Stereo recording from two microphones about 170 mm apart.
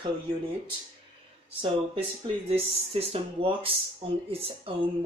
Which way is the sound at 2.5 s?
35° right (ahead or behind).